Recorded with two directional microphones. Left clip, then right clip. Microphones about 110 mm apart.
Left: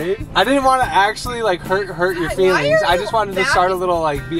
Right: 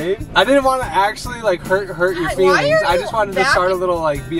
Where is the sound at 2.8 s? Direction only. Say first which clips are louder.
Even; 15° left (ahead or behind).